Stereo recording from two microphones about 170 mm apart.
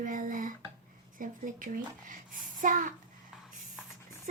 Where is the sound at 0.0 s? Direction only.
50° right (ahead or behind).